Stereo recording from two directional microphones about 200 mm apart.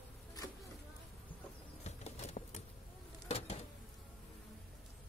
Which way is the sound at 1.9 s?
35° left (ahead or behind).